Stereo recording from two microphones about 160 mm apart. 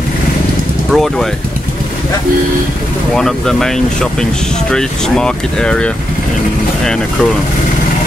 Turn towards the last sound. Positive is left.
turn(degrees=5)  # may be behind; listen again after turning